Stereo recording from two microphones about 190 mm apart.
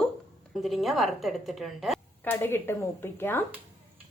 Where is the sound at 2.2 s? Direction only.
10° left (ahead or behind).